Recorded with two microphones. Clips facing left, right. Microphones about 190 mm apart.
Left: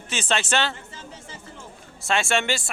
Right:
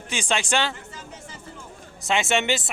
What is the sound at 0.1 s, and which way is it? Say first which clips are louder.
Speech: even; 15° right (ahead or behind).